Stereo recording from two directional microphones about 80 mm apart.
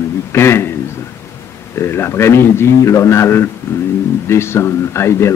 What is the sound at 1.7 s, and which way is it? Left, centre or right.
A man's voice, left.